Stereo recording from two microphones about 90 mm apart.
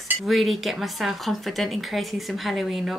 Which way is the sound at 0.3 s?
Centre (ahead or behind).